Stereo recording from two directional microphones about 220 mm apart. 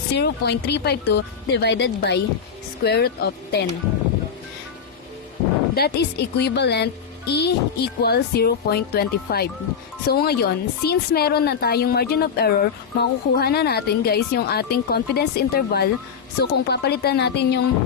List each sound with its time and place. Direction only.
0.1 s a woman's voice: 50° left (ahead or behind)
5.7 s a woman's voice: 45° left (ahead or behind)